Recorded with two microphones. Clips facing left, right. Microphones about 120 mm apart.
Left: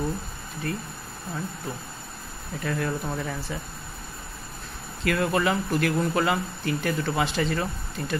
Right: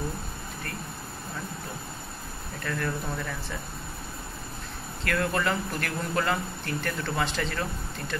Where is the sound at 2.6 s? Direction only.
15° left (ahead or behind).